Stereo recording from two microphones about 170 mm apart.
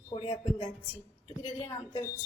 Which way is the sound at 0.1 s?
30° left (ahead or behind).